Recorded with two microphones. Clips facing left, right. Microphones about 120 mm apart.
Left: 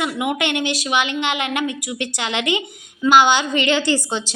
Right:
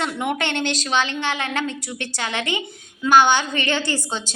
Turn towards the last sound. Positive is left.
turn(degrees=15)  # may be behind; listen again after turning